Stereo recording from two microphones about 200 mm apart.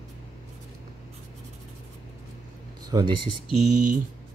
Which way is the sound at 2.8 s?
20° right (ahead or behind).